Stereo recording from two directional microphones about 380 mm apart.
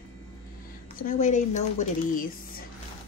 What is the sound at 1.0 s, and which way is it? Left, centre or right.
Speech, centre.